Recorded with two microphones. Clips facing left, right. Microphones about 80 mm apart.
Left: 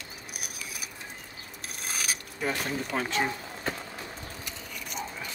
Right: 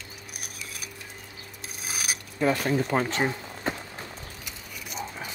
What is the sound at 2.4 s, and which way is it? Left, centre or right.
Speech, right.